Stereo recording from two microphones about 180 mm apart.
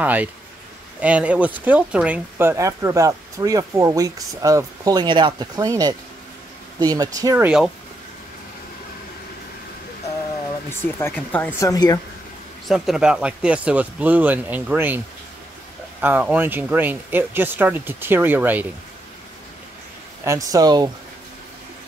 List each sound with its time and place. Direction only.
0.0 s speech: 10° right (ahead or behind)
10.7 s speech: 15° left (ahead or behind)
11.7 s speech: 20° left (ahead or behind)
12.6 s speech: centre (ahead or behind)
16.0 s speech: 10° right (ahead or behind)
20.2 s speech: 20° right (ahead or behind)